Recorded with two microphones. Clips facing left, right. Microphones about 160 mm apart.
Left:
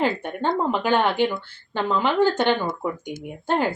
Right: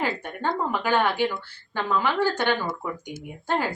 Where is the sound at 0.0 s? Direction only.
20° left (ahead or behind).